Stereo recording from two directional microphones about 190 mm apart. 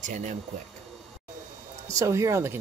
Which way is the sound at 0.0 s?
40° right (ahead or behind).